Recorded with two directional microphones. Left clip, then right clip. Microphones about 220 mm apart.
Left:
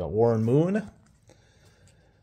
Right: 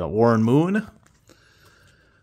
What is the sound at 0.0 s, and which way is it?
Speech, 30° right (ahead or behind).